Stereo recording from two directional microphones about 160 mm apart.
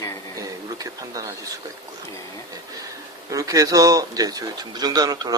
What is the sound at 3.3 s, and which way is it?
Speech, 20° right (ahead or behind).